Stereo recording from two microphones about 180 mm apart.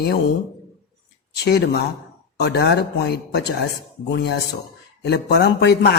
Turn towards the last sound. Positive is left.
turn(degrees=65)  # may be behind; listen again after turning